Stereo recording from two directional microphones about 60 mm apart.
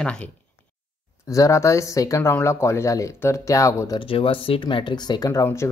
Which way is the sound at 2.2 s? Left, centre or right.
Left.